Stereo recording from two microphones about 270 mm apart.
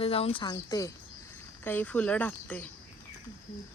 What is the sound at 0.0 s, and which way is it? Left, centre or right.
Speech, left.